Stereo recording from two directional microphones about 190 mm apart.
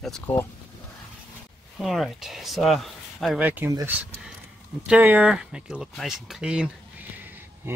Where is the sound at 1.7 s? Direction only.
Centre (ahead or behind).